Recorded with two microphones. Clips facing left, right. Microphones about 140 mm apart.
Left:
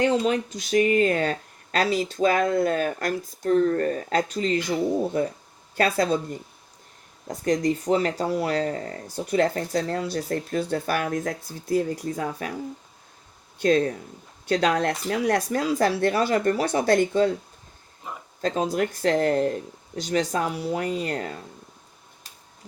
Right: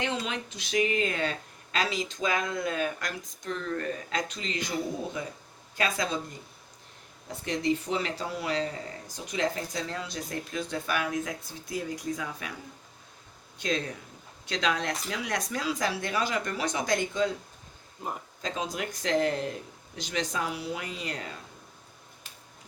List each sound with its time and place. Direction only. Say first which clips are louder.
0.0 s speech: left 10 dB; 40° left (ahead or behind)
5.7 s speech: left 8 dB; 45° left (ahead or behind)
7.3 s speech: left 6 dB; 40° left (ahead or behind)
13.6 s speech: left 11 dB; 50° left (ahead or behind)
18.4 s speech: left 9 dB; 45° left (ahead or behind)